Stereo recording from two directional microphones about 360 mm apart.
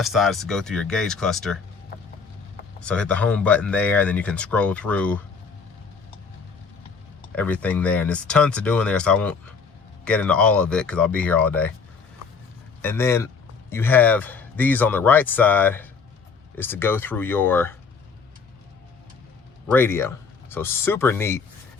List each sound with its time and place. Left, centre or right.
0.0 s speech: centre
1.9 s a sound: left
2.8 s speech: centre
7.3 s speech: centre
12.8 s a man's voice: centre
19.7 s speech: centre